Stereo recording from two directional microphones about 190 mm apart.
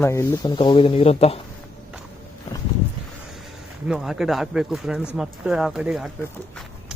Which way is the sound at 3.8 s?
5° right (ahead or behind).